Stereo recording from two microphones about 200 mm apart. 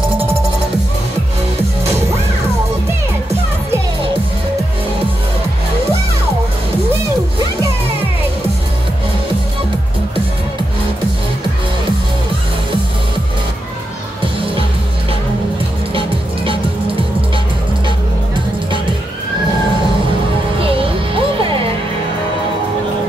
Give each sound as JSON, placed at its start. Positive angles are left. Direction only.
{"t": 15.9, "sound": "music", "side_deg": -25}
{"t": 20.6, "sound": "music", "side_deg": -25}